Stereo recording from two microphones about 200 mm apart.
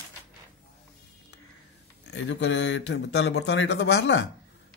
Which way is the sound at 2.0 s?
65° left (ahead or behind).